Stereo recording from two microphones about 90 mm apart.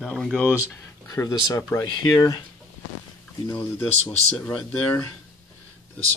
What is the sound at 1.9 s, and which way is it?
Speech, 55° left (ahead or behind).